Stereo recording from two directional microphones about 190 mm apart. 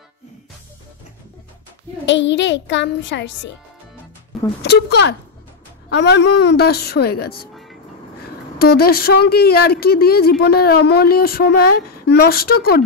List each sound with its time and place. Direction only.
2.0 s a child's voice: 75° left (ahead or behind)
4.6 s a woman's voice: 60° left (ahead or behind)
8.5 s a woman's voice: 55° left (ahead or behind)